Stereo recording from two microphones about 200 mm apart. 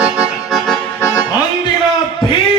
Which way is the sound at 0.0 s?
5° right (ahead or behind).